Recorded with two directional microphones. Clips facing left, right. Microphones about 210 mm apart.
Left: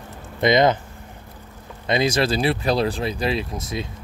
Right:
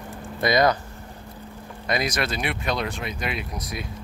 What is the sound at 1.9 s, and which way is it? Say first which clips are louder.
Speech: left 6 dB; 25° left (ahead or behind).